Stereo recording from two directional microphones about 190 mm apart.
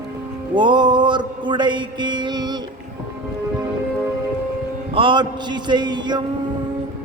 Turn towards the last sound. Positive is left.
turn(degrees=-25)  # may be behind; listen again after turning